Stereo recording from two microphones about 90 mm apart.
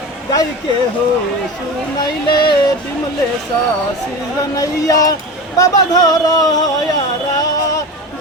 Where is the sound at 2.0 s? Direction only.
60° left (ahead or behind).